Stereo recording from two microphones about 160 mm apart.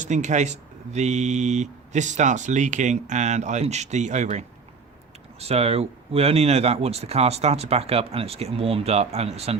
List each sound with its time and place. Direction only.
0.0 s speech: 50° right (ahead or behind)